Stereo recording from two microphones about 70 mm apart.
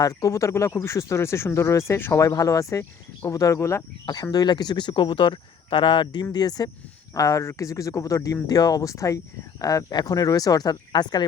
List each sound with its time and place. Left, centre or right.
0.0 s speech: left
4.0 s speech: left
6.3 s speech: left
7.1 s speech: left